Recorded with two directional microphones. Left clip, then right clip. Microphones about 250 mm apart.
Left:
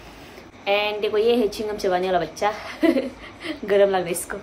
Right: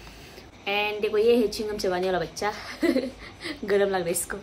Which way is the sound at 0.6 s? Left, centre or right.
Centre.